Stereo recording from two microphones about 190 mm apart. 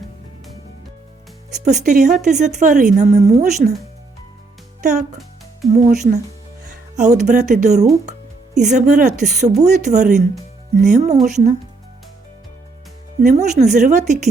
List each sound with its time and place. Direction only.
1.6 s speech: 40° right (ahead or behind)
4.8 s speech: 40° right (ahead or behind)
13.2 s speech: 35° right (ahead or behind)